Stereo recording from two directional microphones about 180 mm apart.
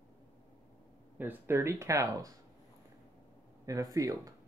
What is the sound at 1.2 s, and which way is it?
Speech, 10° right (ahead or behind).